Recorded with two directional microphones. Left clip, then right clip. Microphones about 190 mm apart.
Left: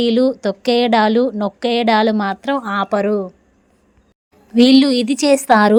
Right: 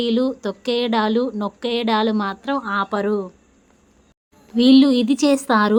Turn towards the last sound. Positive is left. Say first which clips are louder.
# left 5 dB
turn(degrees=25)  # may be behind; listen again after turning